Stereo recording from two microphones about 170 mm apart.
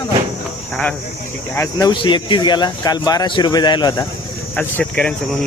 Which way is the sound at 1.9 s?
25° left (ahead or behind).